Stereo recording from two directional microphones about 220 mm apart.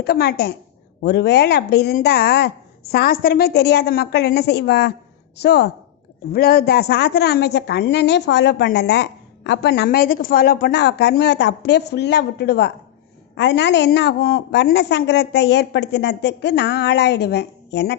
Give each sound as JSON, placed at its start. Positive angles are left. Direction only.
{"t": 0.0, "sound": "a woman's voice", "side_deg": 45}